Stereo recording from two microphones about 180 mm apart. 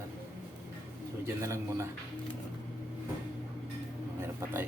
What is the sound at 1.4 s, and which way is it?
Speech, 15° right (ahead or behind).